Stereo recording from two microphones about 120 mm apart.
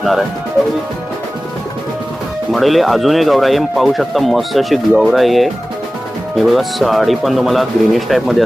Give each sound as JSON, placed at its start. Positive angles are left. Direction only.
{"t": 0.0, "sound": "speech", "side_deg": 0}
{"t": 2.5, "sound": "speech", "side_deg": 0}